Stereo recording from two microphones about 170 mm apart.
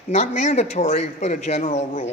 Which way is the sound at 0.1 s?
40° left (ahead or behind).